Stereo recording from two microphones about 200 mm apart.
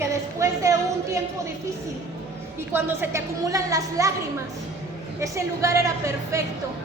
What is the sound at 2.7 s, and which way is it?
Speech, 10° right (ahead or behind).